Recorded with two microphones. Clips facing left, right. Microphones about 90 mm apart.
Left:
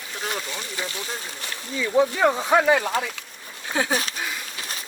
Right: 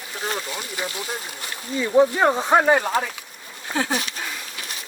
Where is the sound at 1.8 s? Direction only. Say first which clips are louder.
Right 2 dB; 40° right (ahead or behind).